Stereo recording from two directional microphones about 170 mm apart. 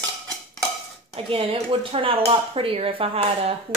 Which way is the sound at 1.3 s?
35° right (ahead or behind).